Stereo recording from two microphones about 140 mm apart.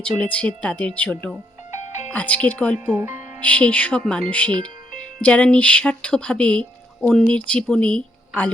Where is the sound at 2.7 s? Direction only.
15° right (ahead or behind).